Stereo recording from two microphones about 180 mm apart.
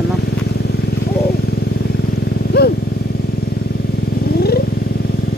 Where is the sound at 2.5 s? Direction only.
65° left (ahead or behind).